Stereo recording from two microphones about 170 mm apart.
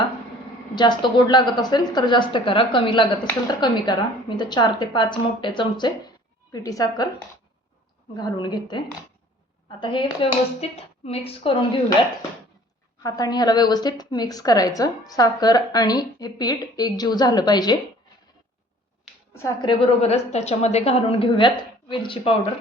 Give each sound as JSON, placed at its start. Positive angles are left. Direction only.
{"t": 0.8, "sound": "a woman's voice", "side_deg": 25}
{"t": 8.1, "sound": "a woman's voice", "side_deg": 25}
{"t": 13.0, "sound": "a woman's voice", "side_deg": 20}
{"t": 19.3, "sound": "a woman's voice", "side_deg": 15}
{"t": 19.6, "sound": "a woman's voice", "side_deg": 35}